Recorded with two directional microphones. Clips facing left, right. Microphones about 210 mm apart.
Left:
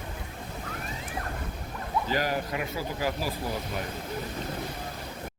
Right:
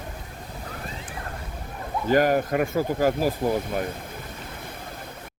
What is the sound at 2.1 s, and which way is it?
Speech, 50° right (ahead or behind).